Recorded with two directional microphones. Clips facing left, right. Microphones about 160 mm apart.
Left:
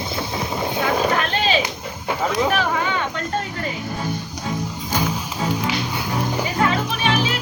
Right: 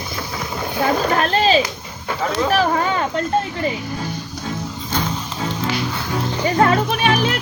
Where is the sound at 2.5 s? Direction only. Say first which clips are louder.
Right 3 dB; 40° right (ahead or behind).